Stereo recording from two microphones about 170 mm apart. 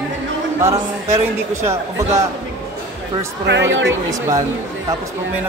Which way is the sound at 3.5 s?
90° right.